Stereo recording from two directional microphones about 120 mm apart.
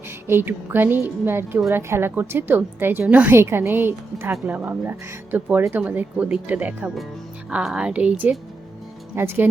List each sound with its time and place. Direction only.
0.3 s a woman's voice: 20° right (ahead or behind)